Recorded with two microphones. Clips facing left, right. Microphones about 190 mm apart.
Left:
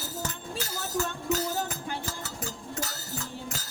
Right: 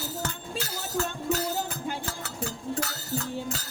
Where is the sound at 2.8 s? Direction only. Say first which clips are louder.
Right 5 dB; 65° right (ahead or behind).